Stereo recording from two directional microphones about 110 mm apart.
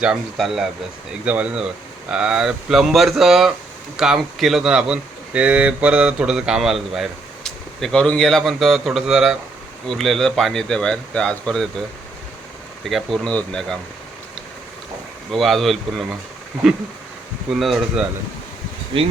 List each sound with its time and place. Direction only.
0.0 s speech: 5° right (ahead or behind)
12.8 s speech: centre (ahead or behind)
15.3 s speech: centre (ahead or behind)
18.9 s speech: 55° right (ahead or behind)